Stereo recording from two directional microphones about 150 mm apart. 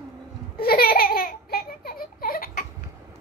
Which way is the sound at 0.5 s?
90° left.